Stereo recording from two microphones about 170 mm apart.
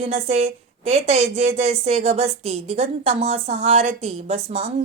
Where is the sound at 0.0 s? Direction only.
40° right (ahead or behind).